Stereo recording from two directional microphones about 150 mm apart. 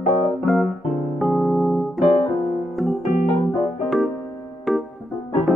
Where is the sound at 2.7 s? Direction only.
Centre (ahead or behind).